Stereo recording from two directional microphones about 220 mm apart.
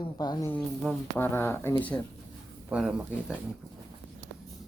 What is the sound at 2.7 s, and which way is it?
Speech, 5° right (ahead or behind).